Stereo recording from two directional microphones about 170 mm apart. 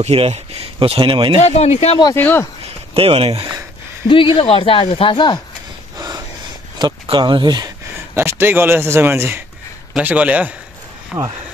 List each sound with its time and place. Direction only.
0.0 s speech: 35° right (ahead or behind)
1.4 s speech: 40° left (ahead or behind)
2.1 s speech: 10° left (ahead or behind)
2.6 s speech: 35° right (ahead or behind)
4.1 s speech: 30° left (ahead or behind)
5.9 s a sound: 20° right (ahead or behind)
6.8 s a man's voice: 25° right (ahead or behind); by 11.3 s 5° right (ahead or behind)